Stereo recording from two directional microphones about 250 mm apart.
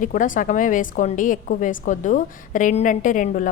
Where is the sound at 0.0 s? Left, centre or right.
Left.